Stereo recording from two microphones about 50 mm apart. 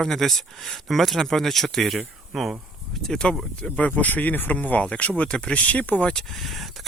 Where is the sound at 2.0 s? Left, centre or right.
Centre.